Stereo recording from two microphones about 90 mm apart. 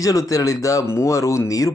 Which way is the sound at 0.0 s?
40° left (ahead or behind).